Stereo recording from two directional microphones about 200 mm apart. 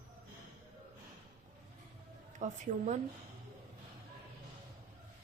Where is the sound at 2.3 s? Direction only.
40° right (ahead or behind).